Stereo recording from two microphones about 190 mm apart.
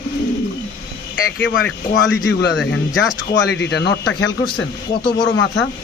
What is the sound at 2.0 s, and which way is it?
Speech, 70° left (ahead or behind).